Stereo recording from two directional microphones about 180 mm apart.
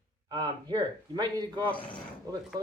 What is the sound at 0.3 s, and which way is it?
A man's voice, 25° right (ahead or behind).